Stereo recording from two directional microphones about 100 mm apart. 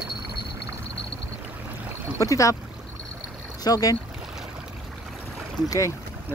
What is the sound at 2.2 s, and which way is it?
Speech, 30° left (ahead or behind).